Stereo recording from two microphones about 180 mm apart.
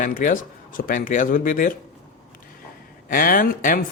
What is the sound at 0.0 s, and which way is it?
A man's voice, 45° left (ahead or behind).